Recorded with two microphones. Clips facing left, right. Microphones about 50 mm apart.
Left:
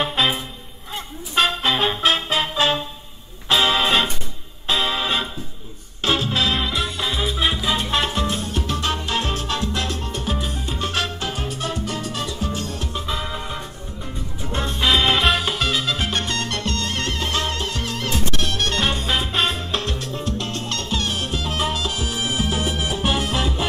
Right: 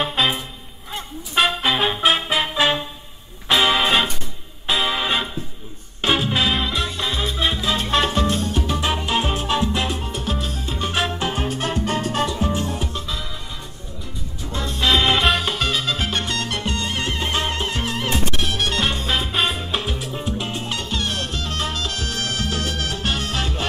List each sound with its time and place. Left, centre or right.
0.0 s music: centre
6.5 s music: centre
9.7 s salsa music: centre
11.1 s music: right
13.0 s music: left
14.5 s music: left
14.8 s music: centre
18.3 s music: centre